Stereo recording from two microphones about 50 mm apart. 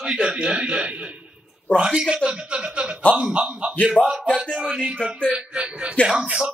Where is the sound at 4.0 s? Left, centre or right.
Left.